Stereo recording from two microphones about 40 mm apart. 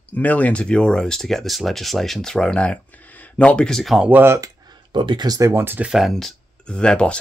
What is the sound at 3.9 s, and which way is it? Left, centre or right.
Speech, centre.